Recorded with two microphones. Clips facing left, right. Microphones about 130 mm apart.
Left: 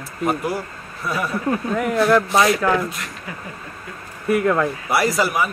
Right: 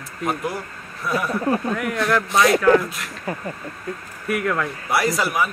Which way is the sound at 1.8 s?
30° left (ahead or behind).